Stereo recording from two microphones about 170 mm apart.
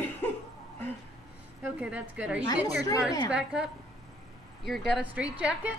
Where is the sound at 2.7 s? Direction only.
20° left (ahead or behind).